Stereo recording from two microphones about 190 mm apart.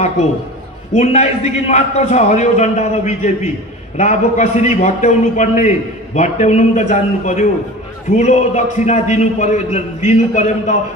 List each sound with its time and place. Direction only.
0.9 s a man's voice: 35° left (ahead or behind)